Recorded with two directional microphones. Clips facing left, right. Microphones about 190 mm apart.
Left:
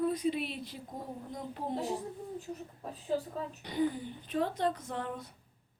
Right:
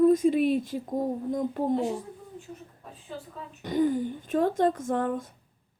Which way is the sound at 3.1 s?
40° left (ahead or behind).